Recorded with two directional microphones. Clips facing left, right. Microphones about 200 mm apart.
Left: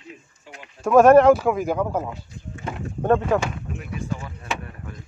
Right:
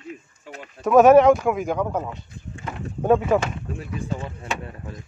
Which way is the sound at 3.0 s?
10° right (ahead or behind).